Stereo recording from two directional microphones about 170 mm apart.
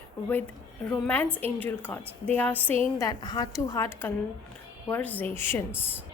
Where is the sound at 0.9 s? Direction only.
10° left (ahead or behind).